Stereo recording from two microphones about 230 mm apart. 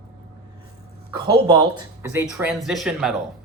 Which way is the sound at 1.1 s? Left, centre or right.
Centre.